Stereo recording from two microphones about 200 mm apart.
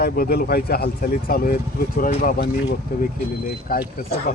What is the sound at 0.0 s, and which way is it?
Speech, 50° left (ahead or behind).